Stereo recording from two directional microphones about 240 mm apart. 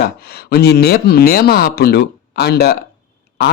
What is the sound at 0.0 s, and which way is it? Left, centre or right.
Speech, left.